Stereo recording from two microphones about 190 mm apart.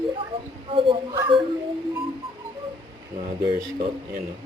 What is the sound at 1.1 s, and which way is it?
Speech, 25° right (ahead or behind).